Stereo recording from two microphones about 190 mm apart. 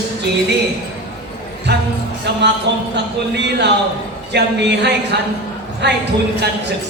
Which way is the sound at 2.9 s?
65° right (ahead or behind).